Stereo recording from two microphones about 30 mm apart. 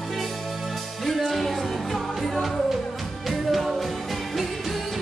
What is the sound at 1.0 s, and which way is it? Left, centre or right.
Music, centre.